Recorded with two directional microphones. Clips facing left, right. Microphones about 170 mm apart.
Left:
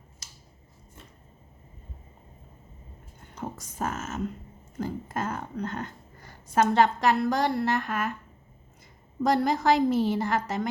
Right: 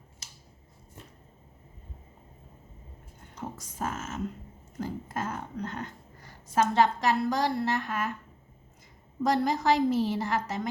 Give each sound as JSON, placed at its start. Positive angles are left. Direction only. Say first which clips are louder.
{"t": 3.3, "sound": "speech", "louder": "left 3 dB", "side_deg": 50}
{"t": 4.8, "sound": "a woman's voice", "louder": "left 2 dB", "side_deg": 60}
{"t": 9.2, "sound": "a woman's voice", "louder": "left 2 dB", "side_deg": 60}